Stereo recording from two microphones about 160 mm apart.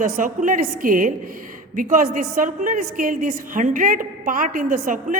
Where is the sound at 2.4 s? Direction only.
55° right (ahead or behind).